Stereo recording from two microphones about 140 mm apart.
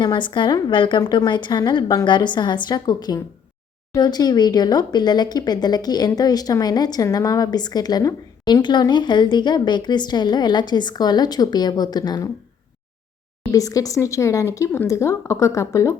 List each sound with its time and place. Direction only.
0.0 s a woman's voice: 35° left (ahead or behind)
13.5 s speech: 25° left (ahead or behind)